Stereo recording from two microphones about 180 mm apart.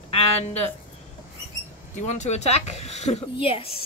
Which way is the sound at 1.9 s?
40° left (ahead or behind).